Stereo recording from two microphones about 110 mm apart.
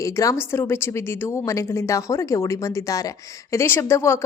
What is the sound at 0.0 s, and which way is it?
Speech, 30° left (ahead or behind).